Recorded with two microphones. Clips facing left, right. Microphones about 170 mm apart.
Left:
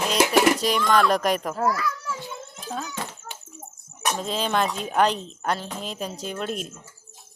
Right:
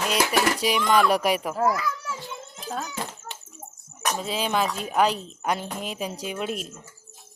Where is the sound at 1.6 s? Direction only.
20° right (ahead or behind).